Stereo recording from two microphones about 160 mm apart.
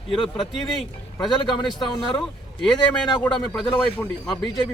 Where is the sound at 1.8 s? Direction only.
25° left (ahead or behind).